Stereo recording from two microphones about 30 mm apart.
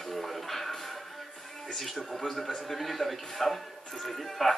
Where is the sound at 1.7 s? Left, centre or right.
Centre.